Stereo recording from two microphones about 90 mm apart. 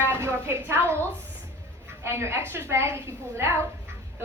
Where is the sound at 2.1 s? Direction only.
30° right (ahead or behind).